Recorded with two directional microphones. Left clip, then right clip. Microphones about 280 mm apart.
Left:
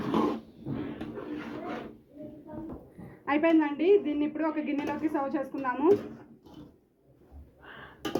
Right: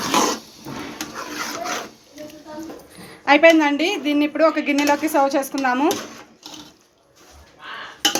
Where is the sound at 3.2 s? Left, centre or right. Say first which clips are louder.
Right 12 dB; right.